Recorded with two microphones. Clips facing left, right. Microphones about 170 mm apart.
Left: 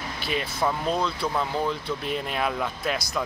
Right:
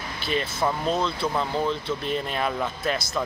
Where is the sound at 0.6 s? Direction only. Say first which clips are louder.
Even; 5° right (ahead or behind).